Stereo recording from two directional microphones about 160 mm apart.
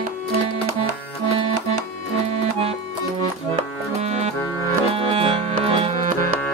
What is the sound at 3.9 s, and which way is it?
Music, 45° right (ahead or behind).